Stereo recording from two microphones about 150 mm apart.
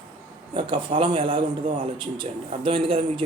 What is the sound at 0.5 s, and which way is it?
A man's voice, 35° right (ahead or behind).